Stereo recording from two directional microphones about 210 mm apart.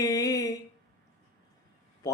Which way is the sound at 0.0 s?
15° left (ahead or behind).